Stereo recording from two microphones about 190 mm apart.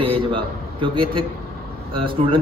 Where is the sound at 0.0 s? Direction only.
30° right (ahead or behind).